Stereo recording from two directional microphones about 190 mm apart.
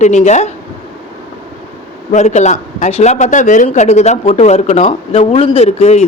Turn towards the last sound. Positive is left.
turn(degrees=35)  # may be behind; listen again after turning